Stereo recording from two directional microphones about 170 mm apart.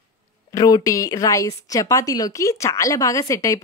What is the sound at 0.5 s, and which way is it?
A woman's voice, 20° left (ahead or behind).